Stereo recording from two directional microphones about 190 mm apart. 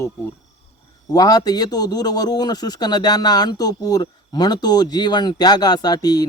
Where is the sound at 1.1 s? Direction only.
20° left (ahead or behind).